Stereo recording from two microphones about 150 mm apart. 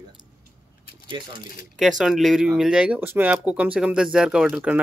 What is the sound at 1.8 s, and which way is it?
Speech, centre (ahead or behind).